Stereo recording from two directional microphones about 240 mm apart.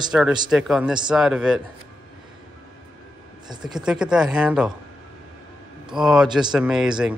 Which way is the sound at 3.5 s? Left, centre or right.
Centre.